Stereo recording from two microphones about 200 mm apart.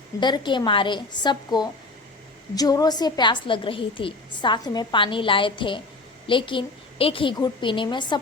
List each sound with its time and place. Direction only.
0.2 s a woman's voice: 20° left (ahead or behind)